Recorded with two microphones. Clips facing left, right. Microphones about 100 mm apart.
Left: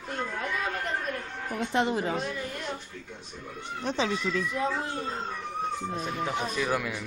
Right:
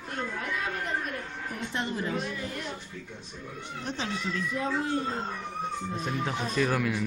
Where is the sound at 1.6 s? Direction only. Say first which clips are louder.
Left 6 dB; 70° left (ahead or behind).